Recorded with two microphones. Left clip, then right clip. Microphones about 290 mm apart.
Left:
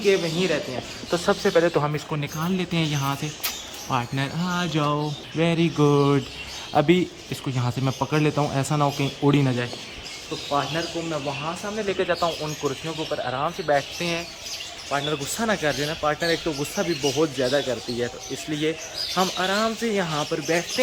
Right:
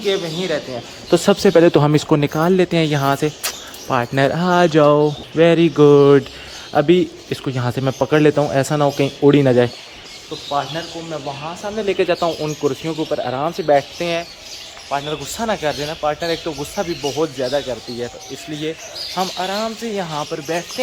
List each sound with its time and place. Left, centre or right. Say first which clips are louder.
0.0 s speech: right 1 dB; centre
1.1 s speech: right 8 dB; right
2.0 s speech: right 13 dB; centre
11.9 s speech: right 6 dB; right
14.0 s speech: right 6 dB; centre
19.1 s speech: right 2 dB; centre